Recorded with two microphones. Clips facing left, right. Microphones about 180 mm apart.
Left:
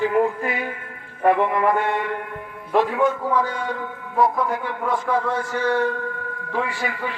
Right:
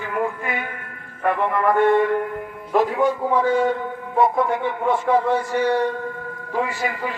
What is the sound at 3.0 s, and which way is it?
A man's voice, 30° right (ahead or behind).